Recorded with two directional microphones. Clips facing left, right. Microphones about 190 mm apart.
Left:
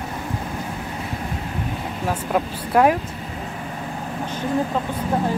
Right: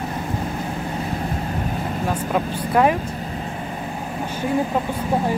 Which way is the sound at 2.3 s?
Centre (ahead or behind).